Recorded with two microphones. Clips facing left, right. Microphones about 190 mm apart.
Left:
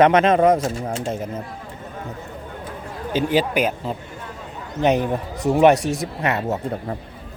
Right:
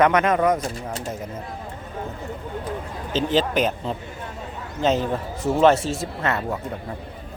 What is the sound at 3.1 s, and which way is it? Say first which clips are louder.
Speech: left 1 dB; 10° left (ahead or behind).